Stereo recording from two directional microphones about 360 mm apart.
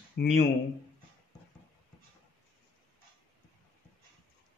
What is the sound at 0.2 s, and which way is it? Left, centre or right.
Speech, left.